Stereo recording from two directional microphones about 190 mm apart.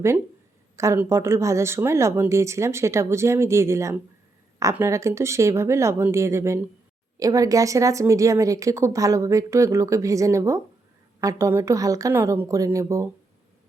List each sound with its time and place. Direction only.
0.8 s a woman's voice: 15° right (ahead or behind)